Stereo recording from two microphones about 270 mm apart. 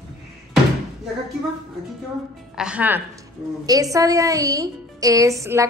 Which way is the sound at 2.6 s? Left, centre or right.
Centre.